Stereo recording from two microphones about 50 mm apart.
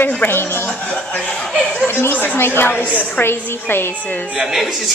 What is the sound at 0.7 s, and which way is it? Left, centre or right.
Speech, left.